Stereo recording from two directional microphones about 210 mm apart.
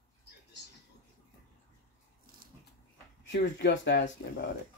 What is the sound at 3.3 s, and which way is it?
Speech, 60° left (ahead or behind).